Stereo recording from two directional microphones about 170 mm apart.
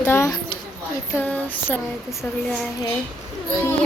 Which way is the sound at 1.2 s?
10° left (ahead or behind).